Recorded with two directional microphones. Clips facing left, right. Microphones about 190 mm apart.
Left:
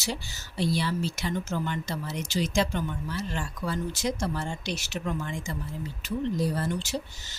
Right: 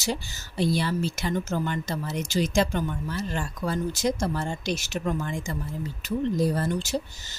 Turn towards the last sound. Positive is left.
turn(degrees=-40)  # may be behind; listen again after turning